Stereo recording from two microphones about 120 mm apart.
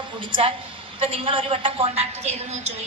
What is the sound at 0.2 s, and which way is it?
A woman's voice, 45° right (ahead or behind).